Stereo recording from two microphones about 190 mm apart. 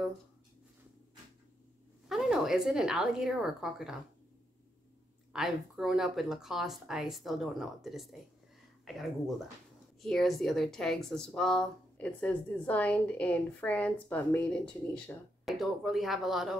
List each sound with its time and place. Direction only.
2.0 s a woman's voice: centre (ahead or behind)
5.3 s a woman's voice: centre (ahead or behind)